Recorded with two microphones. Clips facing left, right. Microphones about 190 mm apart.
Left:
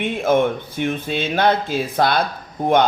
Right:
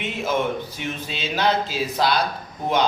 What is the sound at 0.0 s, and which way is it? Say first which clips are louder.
Speech: left 6 dB; 55° left (ahead or behind).